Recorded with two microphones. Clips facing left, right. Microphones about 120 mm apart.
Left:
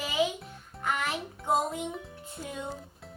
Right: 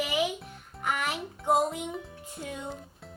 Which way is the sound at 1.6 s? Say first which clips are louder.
Right 2 dB; centre (ahead or behind).